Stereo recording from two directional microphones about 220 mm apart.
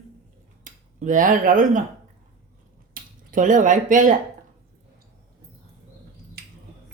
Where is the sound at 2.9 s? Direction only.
35° right (ahead or behind).